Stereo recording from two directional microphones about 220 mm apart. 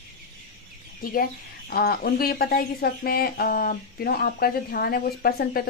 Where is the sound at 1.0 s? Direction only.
45° left (ahead or behind).